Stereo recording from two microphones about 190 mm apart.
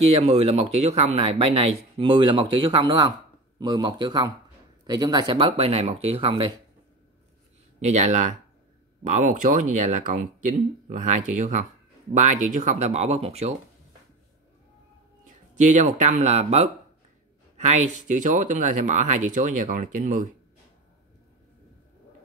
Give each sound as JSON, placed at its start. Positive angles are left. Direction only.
{"t": 0.0, "sound": "speech", "side_deg": -35}
{"t": 7.8, "sound": "speech", "side_deg": -40}
{"t": 15.5, "sound": "speech", "side_deg": -40}